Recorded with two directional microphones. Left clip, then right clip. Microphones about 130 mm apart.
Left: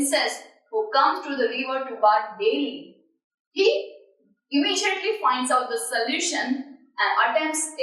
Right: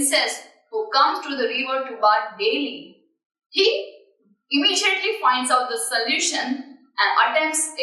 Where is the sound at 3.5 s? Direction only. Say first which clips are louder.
Right 1 dB; 15° left (ahead or behind).